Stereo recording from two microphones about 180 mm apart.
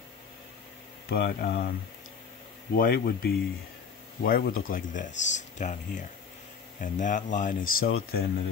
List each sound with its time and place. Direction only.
1.1 s speech: 65° left (ahead or behind)